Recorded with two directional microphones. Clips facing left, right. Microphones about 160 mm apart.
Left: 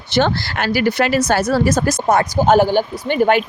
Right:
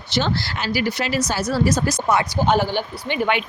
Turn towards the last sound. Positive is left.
turn(degrees=45)  # may be behind; listen again after turning